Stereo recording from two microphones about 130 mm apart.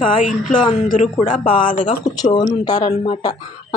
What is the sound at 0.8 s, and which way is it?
Speech, 80° left.